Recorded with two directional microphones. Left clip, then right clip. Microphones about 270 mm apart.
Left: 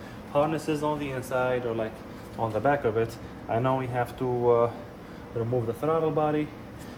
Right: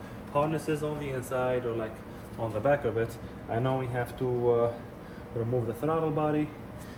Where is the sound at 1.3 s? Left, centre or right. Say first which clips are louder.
Left 3 dB; left.